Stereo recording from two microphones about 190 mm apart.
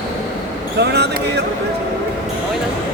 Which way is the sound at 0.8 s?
60° right (ahead or behind).